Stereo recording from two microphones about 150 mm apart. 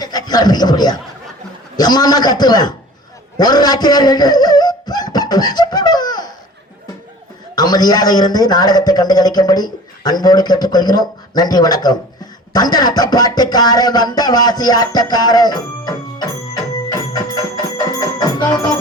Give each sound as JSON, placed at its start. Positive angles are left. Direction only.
{"t": 0.0, "sound": "a man's voice", "side_deg": 25}
{"t": 3.3, "sound": "music", "side_deg": 25}
{"t": 7.5, "sound": "a man's voice", "side_deg": 25}